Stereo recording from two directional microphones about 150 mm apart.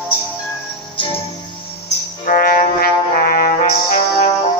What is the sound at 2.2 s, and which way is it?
Music, 70° left (ahead or behind).